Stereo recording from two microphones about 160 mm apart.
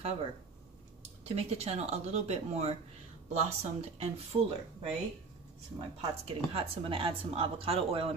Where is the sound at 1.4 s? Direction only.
40° right (ahead or behind).